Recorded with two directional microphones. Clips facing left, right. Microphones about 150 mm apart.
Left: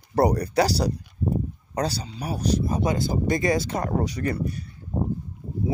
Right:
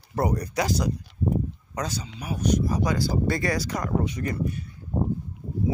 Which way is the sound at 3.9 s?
35° left (ahead or behind).